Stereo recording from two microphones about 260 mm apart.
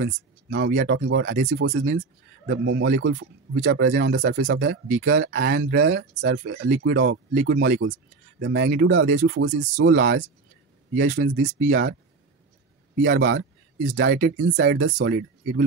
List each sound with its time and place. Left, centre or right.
0.0 s speech: right
13.0 s speech: right